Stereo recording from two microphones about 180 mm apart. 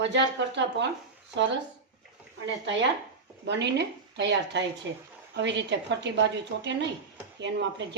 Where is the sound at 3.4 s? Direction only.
70° right (ahead or behind).